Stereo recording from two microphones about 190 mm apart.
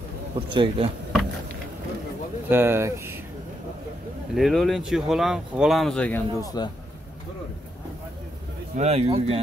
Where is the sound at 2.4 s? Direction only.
10° right (ahead or behind).